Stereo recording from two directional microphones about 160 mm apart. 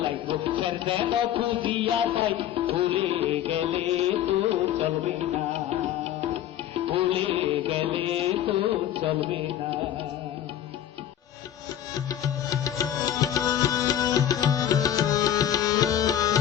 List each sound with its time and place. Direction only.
0.0 s music: 35° right (ahead or behind)
6.7 s music: 35° right (ahead or behind)
11.9 s music: 20° left (ahead or behind)